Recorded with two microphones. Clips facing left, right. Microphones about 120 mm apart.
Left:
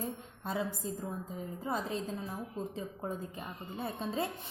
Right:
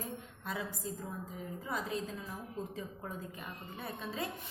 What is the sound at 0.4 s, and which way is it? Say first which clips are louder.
A woman's voice: left 5 dB; 30° left (ahead or behind).